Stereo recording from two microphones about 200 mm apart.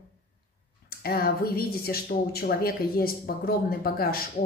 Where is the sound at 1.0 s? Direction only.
50° left (ahead or behind).